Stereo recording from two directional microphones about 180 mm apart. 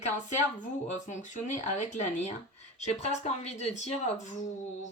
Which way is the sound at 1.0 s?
40° left (ahead or behind).